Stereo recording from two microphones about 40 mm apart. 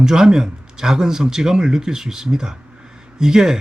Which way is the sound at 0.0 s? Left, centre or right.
Centre.